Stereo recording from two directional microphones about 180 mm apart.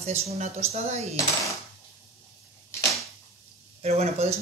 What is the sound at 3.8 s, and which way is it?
Speech, 35° right (ahead or behind).